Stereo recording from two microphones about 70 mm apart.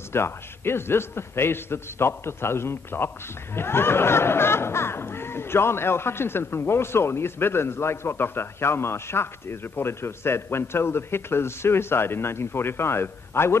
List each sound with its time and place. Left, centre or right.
0.1 s speech: left